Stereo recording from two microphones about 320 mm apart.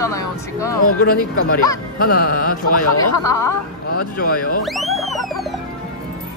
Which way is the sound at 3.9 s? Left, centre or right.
Left.